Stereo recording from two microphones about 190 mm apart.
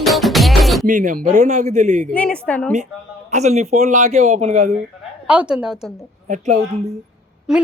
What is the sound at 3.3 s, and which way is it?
A man's voice, 35° right (ahead or behind).